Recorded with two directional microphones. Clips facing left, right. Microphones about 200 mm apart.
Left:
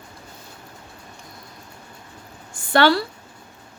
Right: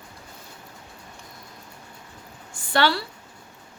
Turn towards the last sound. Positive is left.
turn(degrees=50)  # may be behind; listen again after turning